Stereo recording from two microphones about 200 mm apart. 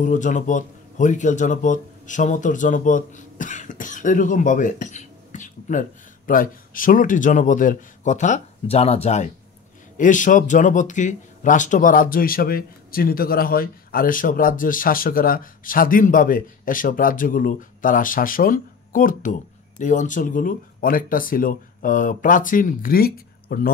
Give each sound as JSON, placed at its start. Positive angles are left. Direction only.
{"t": 0.0, "sound": "speech", "side_deg": 40}